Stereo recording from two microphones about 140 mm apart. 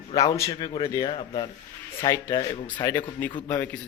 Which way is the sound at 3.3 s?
35° left (ahead or behind).